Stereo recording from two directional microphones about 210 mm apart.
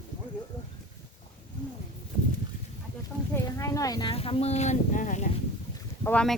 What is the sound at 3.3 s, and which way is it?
Speech, 15° left (ahead or behind).